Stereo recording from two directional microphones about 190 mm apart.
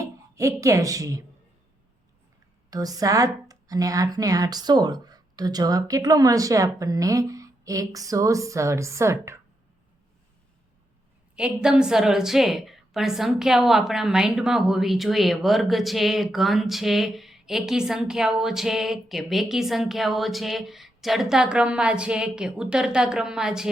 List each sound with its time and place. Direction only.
0.0 s speech: 15° right (ahead or behind)
2.6 s a woman's voice: 20° right (ahead or behind)
11.3 s a woman's voice: 5° right (ahead or behind)